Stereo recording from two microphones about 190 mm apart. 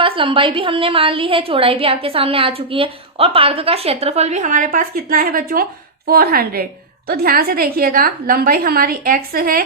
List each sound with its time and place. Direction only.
0.0 s a woman's voice: 25° right (ahead or behind); by 9.6 s 50° right (ahead or behind)